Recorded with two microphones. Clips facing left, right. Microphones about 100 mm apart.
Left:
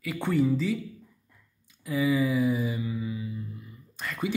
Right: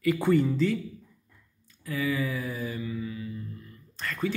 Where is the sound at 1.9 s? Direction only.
15° left (ahead or behind).